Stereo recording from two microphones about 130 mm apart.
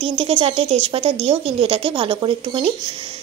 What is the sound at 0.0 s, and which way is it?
Speech, 45° right (ahead or behind).